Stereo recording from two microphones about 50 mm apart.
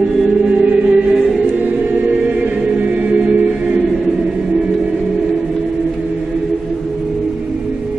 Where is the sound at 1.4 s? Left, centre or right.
Right.